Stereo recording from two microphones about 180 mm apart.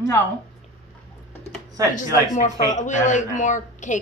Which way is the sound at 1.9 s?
45° left (ahead or behind).